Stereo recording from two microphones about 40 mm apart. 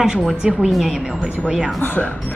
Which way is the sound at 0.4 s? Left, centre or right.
Right.